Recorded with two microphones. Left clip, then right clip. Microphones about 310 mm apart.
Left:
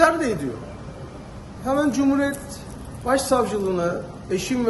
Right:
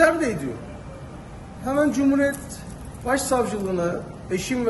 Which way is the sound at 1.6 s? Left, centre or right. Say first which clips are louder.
Even; centre.